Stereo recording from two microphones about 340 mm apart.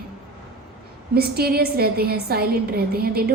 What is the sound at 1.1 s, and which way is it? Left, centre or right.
A woman's voice, right.